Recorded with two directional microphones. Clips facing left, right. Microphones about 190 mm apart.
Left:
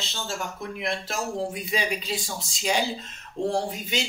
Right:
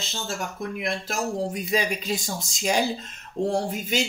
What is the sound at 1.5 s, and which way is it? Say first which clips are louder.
Speech: right 3 dB; 45° right (ahead or behind).